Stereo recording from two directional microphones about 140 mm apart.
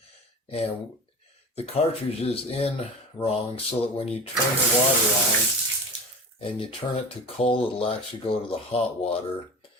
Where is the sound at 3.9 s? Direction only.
45° left (ahead or behind).